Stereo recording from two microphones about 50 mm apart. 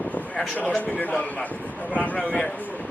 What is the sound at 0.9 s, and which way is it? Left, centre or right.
Speech, left.